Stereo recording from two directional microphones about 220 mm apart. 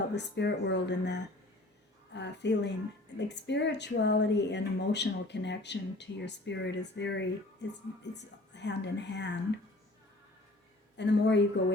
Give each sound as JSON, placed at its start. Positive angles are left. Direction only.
{"t": 0.1, "sound": "speech", "side_deg": 50}
{"t": 10.9, "sound": "speech", "side_deg": 50}